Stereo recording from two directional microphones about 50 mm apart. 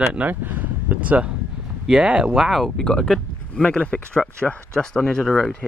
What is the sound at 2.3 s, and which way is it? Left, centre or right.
Speech, centre.